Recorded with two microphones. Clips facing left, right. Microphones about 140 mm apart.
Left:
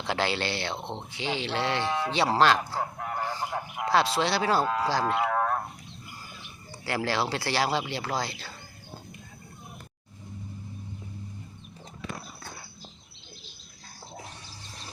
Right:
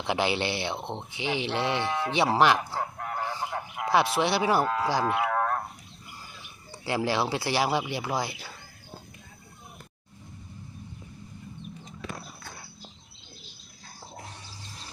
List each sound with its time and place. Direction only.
0.0 s speech: 15° right (ahead or behind)
2.7 s fowl: 5° left (ahead or behind)
3.8 s speech: 20° right (ahead or behind)
4.6 s speech: 5° left (ahead or behind)
4.9 s speech: 15° right (ahead or behind)
5.3 s a sound: 5° left (ahead or behind)
6.8 s speech: 20° right (ahead or behind)